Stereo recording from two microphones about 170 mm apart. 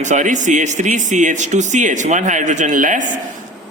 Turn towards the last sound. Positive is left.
turn(degrees=-50)  # may be behind; listen again after turning